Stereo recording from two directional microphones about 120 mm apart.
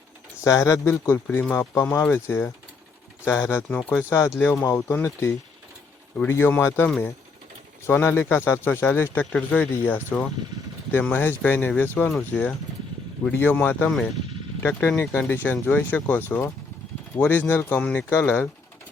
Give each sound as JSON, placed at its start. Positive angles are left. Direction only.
{"t": 0.4, "sound": "speech", "side_deg": 25}